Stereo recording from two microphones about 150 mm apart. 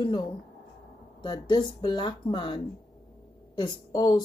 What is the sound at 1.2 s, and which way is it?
A woman's voice, 30° left (ahead or behind).